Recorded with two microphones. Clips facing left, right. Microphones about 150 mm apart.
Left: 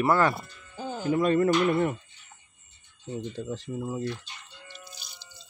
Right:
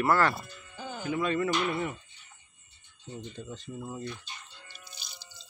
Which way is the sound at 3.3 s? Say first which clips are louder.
Left 7 dB; 75° left (ahead or behind).